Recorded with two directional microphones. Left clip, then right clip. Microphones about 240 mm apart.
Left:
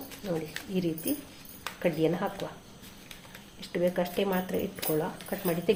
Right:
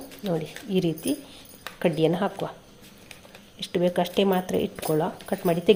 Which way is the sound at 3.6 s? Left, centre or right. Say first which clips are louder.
Right 5 dB; right.